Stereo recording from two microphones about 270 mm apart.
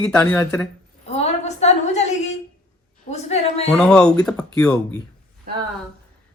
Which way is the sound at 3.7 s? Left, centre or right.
Centre.